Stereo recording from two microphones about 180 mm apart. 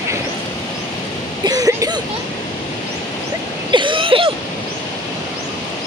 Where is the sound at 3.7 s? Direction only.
25° right (ahead or behind).